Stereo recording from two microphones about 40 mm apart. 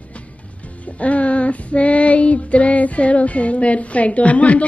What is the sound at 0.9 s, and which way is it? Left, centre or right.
Child singing, left.